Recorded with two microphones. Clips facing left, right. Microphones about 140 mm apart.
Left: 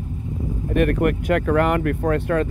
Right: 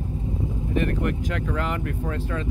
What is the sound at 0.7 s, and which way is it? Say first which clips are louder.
Speech: left 7 dB; 60° left (ahead or behind).